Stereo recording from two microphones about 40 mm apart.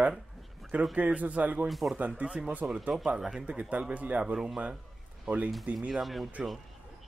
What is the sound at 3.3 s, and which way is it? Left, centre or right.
Speech, right.